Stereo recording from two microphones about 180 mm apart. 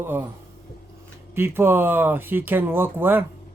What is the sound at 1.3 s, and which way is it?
Speech, 10° right (ahead or behind).